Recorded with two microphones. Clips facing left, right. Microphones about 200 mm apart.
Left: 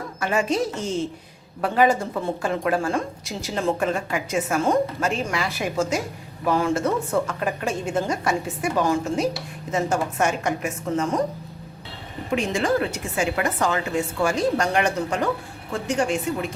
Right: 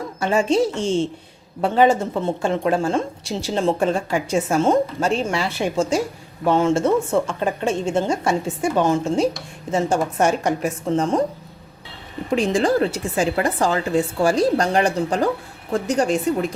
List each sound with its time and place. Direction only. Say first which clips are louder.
0.2 s a woman's voice: right 5 dB; 30° right (ahead or behind)
12.3 s a woman's voice: right 4 dB; 35° right (ahead or behind)